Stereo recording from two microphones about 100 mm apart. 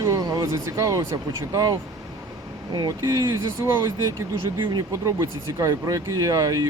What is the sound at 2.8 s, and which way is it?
Speech, 35° right (ahead or behind).